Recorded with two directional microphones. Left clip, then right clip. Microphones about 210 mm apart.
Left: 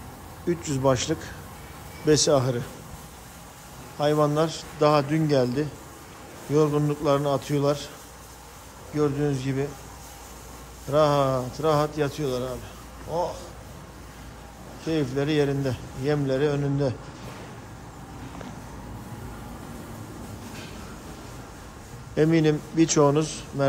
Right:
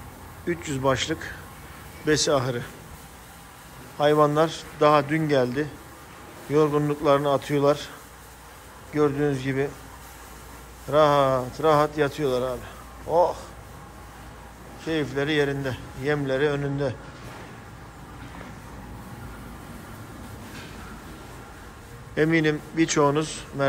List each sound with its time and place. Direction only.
0.5 s a man's voice: 20° left (ahead or behind)
4.0 s speech: 15° left (ahead or behind)
8.9 s speech: 15° left (ahead or behind)
10.9 s speech: 15° left (ahead or behind)
14.9 s a man's voice: 20° left (ahead or behind)
22.1 s a man's voice: 20° left (ahead or behind)